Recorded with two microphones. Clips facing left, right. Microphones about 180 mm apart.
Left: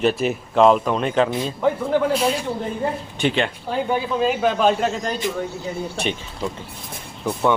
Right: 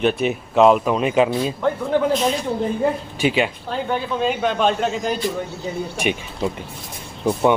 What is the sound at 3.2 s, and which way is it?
Speech, 5° right (ahead or behind).